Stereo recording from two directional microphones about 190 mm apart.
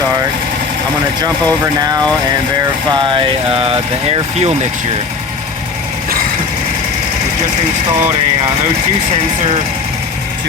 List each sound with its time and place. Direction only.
1.2 s speech: 20° right (ahead or behind)